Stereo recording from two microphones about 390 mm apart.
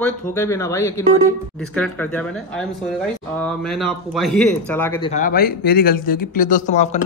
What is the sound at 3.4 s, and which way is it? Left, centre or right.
Speech, centre.